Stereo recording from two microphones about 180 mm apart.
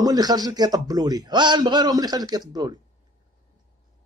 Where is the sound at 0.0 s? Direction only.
20° right (ahead or behind).